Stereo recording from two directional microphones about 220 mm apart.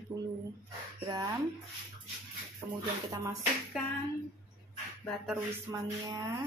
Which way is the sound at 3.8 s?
Centre (ahead or behind).